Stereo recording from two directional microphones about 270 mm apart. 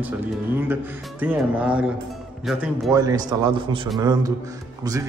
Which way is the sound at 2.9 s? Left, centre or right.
Centre.